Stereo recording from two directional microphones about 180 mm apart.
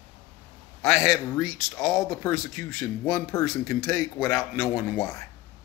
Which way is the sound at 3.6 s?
15° left (ahead or behind).